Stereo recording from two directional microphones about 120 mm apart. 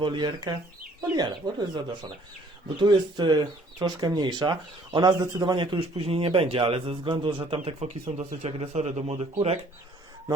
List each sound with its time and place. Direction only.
0.0 s speech: 40° right (ahead or behind)
7.6 s speech: 60° right (ahead or behind)